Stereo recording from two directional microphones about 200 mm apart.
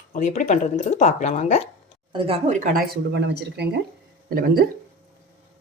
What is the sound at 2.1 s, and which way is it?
Speech, 30° right (ahead or behind).